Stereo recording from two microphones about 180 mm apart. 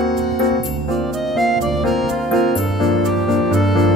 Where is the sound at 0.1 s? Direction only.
Centre (ahead or behind).